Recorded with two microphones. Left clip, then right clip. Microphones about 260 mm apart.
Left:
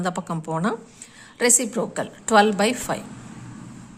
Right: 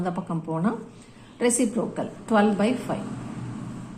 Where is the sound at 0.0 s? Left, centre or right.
Left.